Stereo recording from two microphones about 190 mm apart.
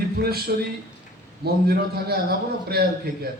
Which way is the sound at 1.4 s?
55° right (ahead or behind).